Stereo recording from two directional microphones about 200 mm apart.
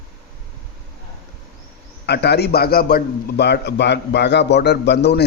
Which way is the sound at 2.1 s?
55° left (ahead or behind).